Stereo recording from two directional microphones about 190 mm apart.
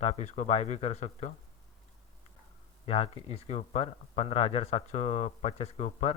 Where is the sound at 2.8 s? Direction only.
30° left (ahead or behind).